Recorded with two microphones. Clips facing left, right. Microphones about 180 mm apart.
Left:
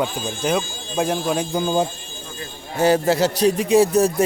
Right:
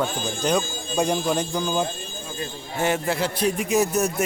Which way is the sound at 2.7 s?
35° left (ahead or behind).